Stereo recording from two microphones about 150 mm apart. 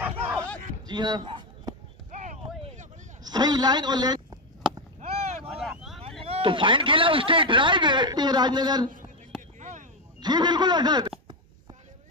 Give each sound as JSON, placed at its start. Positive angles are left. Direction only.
{"t": 0.8, "sound": "a sound", "side_deg": -30}
{"t": 3.3, "sound": "a man's voice", "side_deg": -25}
{"t": 5.0, "sound": "boat", "side_deg": -45}
{"t": 5.6, "sound": "vehicle", "side_deg": 0}
{"t": 6.2, "sound": "a man's voice", "side_deg": -35}
{"t": 9.6, "sound": "a sound", "side_deg": -55}
{"t": 10.2, "sound": "a man's voice", "side_deg": -30}